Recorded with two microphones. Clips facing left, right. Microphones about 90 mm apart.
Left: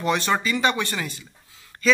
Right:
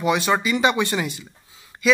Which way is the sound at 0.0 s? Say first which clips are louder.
Right 2 dB; 10° right (ahead or behind).